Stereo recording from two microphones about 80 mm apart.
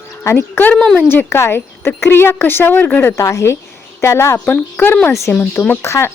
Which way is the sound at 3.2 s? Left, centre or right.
Left.